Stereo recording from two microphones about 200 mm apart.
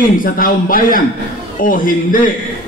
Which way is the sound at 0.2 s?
45° left (ahead or behind).